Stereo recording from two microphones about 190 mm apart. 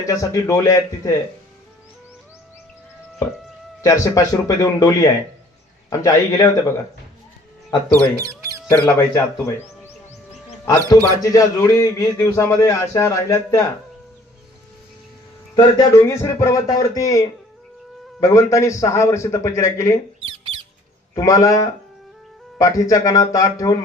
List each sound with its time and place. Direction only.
0.0 s a man's voice: 15° left (ahead or behind)
4.0 s a man's voice: 15° left (ahead or behind)
7.9 s speech: 15° right (ahead or behind)
8.7 s a man's voice: 10° left (ahead or behind)
10.7 s a man's voice: 15° left (ahead or behind)
15.5 s a man's voice: 15° left (ahead or behind)
20.2 s squawk: 30° right (ahead or behind)
21.2 s a man's voice: 20° left (ahead or behind)